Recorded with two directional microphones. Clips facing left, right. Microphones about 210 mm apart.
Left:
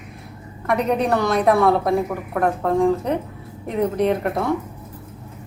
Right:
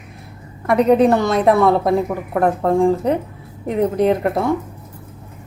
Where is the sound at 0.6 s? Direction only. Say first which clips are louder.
Right 7 dB; 30° right (ahead or behind).